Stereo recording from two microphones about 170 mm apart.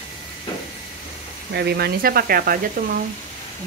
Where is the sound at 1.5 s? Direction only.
75° right (ahead or behind); by 3.0 s 60° right (ahead or behind).